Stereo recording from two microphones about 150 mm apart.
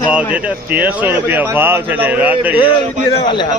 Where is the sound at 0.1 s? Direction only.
10° right (ahead or behind).